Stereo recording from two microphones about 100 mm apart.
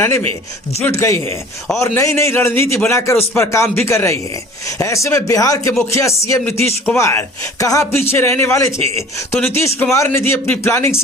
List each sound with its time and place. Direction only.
0.0 s a man's voice: 25° left (ahead or behind)
6.4 s a man's voice: 20° left (ahead or behind)